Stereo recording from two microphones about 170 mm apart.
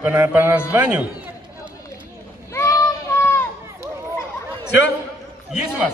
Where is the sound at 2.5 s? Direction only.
15° left (ahead or behind).